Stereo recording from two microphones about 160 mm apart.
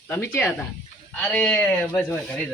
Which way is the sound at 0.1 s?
15° left (ahead or behind).